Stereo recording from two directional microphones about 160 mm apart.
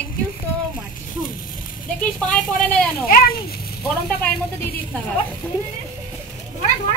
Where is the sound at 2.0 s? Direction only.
10° left (ahead or behind).